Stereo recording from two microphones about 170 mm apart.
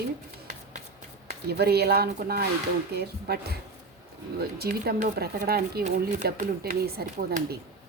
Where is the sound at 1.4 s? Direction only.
70° right (ahead or behind).